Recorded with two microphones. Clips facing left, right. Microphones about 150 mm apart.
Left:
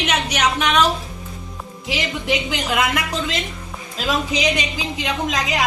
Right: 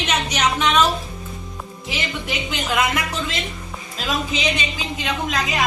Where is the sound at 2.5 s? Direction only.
10° left (ahead or behind).